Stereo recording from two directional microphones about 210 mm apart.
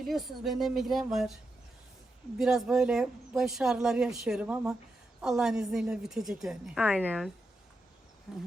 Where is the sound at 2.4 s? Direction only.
Centre (ahead or behind).